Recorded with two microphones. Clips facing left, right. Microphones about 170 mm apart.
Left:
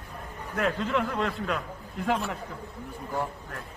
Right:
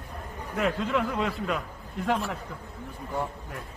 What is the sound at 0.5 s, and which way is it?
A man's voice, centre (ahead or behind).